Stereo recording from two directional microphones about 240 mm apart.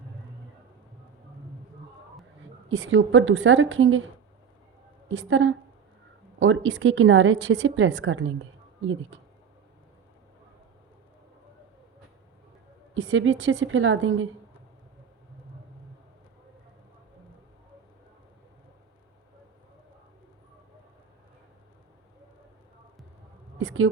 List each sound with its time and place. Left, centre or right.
2.6 s a woman's voice: right
5.0 s a woman's voice: right
12.9 s a woman's voice: right
23.6 s a sound: right